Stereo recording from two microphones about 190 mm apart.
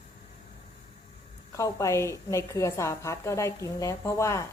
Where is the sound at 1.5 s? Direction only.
15° left (ahead or behind).